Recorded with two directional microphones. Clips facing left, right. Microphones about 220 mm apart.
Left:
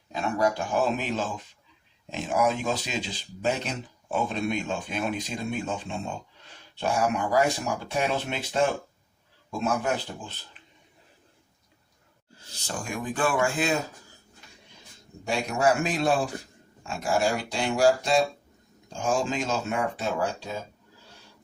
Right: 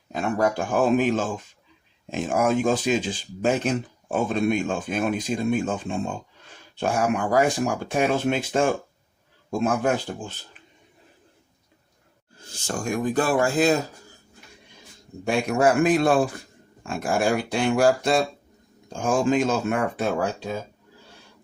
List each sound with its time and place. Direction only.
0.1 s speech: 50° right (ahead or behind)
12.5 s speech: 45° right (ahead or behind)
15.3 s speech: 55° right (ahead or behind)